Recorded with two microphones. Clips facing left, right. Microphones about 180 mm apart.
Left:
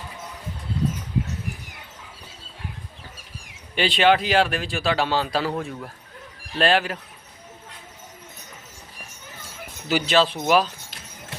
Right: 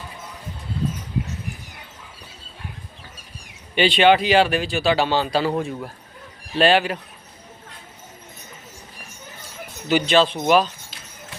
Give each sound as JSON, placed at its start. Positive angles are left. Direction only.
{"t": 3.8, "sound": "speech", "side_deg": 0}
{"t": 9.9, "sound": "speech", "side_deg": 5}